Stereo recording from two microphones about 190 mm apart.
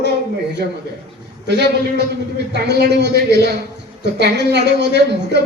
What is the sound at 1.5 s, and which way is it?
A man's voice, 60° right (ahead or behind).